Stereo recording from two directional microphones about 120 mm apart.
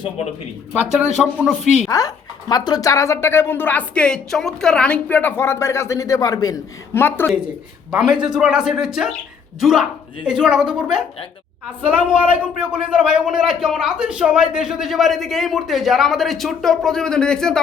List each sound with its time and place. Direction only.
0.7 s speech: 10° right (ahead or behind)
1.9 s speech: 30° left (ahead or behind)
6.9 s speech: 20° left (ahead or behind)
7.3 s a man's voice: 10° right (ahead or behind)
12.5 s a man's voice: 10° right (ahead or behind); by 17.6 s 5° left (ahead or behind)